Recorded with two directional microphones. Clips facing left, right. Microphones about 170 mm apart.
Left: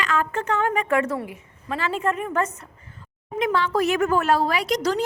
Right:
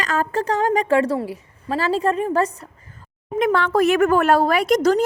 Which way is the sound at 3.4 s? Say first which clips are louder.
Right 4 dB; 55° right (ahead or behind).